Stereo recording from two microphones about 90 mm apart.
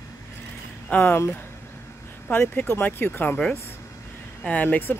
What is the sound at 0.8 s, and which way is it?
Speech, 25° left (ahead or behind).